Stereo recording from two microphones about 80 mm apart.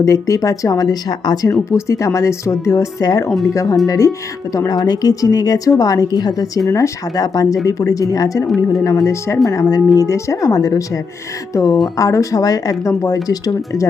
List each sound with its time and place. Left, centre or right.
0.0 s a woman's voice: left
1.7 s speech: left
3.2 s speech: centre
3.5 s a woman's voice: left
4.7 s a woman's voice: left
8.4 s speech: centre
8.8 s speech: left
9.5 s a woman's voice: left
13.2 s a woman's voice: left